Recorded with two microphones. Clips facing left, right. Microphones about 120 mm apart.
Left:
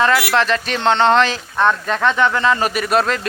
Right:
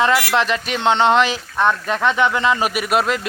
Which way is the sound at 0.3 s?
15° right (ahead or behind).